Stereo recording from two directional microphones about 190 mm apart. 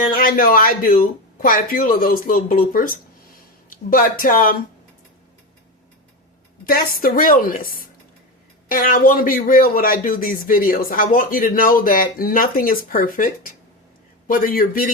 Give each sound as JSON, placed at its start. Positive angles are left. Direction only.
{"t": 0.0, "sound": "speech", "side_deg": 45}
{"t": 6.7, "sound": "speech", "side_deg": 50}